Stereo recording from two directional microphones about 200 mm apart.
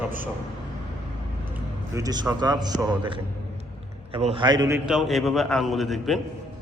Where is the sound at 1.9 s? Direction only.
20° right (ahead or behind).